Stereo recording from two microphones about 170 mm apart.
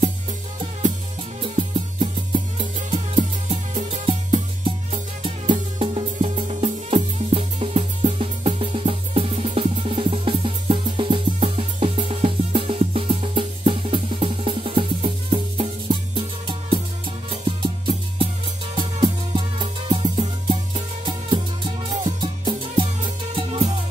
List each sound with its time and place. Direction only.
2.0 s music: 30° right (ahead or behind)
5.2 s music: 30° right (ahead or behind)